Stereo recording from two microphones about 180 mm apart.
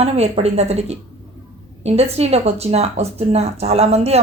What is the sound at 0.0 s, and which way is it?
Speech, 35° right (ahead or behind).